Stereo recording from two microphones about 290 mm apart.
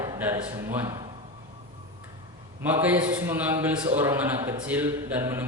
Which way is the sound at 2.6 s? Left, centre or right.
Centre.